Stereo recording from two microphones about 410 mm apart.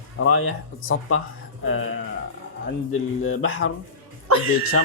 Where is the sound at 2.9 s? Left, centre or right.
Left.